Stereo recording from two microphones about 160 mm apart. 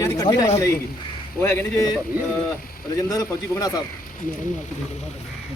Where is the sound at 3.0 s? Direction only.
20° left (ahead or behind).